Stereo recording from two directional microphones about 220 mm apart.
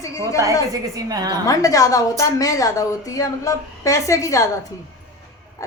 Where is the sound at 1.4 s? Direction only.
15° left (ahead or behind).